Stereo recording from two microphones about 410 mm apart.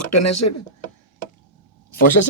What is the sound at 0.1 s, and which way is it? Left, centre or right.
Speech, left.